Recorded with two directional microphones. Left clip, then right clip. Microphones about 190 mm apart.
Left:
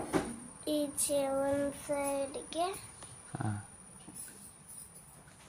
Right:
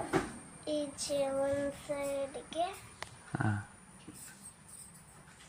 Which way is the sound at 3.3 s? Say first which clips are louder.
Right 4 dB; 20° right (ahead or behind).